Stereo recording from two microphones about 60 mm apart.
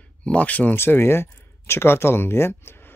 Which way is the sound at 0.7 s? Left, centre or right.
Left.